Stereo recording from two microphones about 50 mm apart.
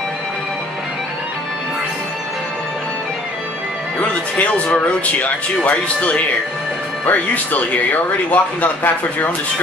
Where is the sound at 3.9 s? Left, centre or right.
Left.